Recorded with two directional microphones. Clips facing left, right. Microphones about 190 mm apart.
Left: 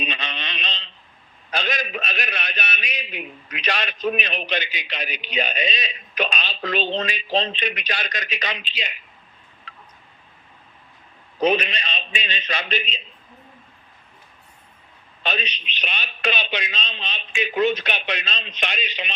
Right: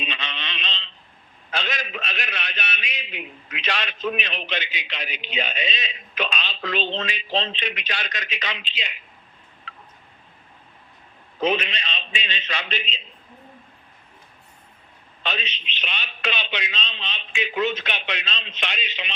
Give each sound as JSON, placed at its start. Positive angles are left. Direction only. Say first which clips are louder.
{"t": 0.0, "sound": "a sound", "louder": "left 3 dB", "side_deg": 45}
{"t": 1.5, "sound": "a man's voice", "louder": "left 3 dB", "side_deg": 40}
{"t": 11.4, "sound": "a man's voice", "louder": "left 3 dB", "side_deg": 40}
{"t": 15.2, "sound": "a man's voice", "louder": "left 3 dB", "side_deg": 45}